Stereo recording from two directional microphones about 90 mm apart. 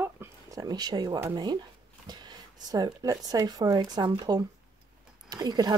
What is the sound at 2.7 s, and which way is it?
Speech, 40° right (ahead or behind).